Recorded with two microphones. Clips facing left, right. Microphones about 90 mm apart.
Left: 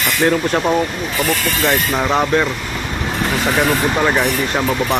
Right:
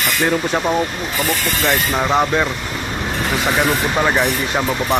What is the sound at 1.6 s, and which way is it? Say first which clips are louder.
Speech: left 1 dB; 5° right (ahead or behind).